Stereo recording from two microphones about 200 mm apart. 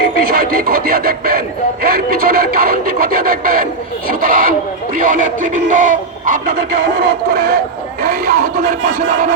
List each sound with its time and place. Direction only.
0.0 s speech: 45° right (ahead or behind)